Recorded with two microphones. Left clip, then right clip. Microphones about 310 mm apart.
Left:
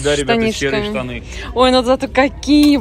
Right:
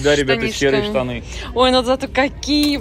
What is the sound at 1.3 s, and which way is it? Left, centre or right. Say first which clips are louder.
Speech: left 2 dB; centre.